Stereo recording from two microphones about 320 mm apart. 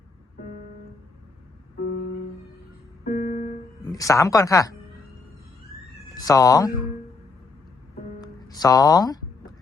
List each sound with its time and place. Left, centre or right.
3.0 s music: left
3.9 s speech: centre
6.1 s speech: centre
8.2 s speech: centre